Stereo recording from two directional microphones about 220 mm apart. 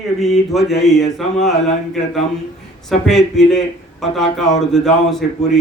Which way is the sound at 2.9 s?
Centre (ahead or behind).